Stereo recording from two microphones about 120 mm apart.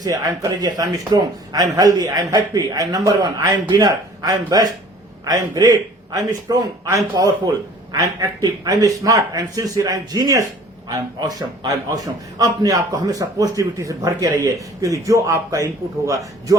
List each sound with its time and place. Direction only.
0.0 s a man's voice: 30° right (ahead or behind)